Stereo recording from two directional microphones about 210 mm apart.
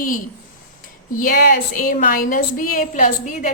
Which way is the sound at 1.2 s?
40° left (ahead or behind).